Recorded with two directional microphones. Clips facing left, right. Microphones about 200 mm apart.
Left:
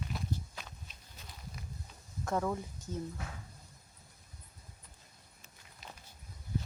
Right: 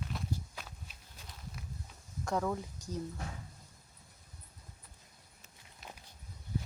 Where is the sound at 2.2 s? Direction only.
Centre (ahead or behind).